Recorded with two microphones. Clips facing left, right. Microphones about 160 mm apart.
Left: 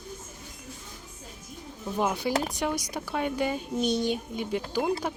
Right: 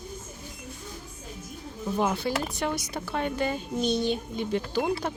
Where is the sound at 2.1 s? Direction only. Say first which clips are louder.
Left 1 dB; 10° left (ahead or behind).